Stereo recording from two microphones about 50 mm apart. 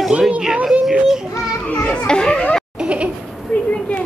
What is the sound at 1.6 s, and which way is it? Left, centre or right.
Speech, left.